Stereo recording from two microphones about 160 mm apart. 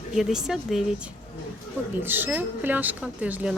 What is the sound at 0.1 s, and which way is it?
Speech, 5° right (ahead or behind).